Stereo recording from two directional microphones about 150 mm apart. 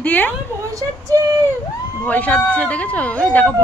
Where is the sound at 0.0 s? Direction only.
10° left (ahead or behind).